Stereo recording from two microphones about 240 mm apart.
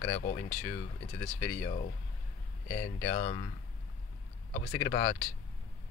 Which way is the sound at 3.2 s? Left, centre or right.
Left.